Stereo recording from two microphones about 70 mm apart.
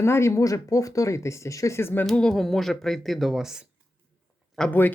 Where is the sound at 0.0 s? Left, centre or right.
Left.